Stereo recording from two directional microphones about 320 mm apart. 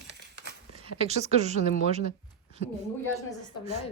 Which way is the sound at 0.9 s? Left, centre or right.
Right.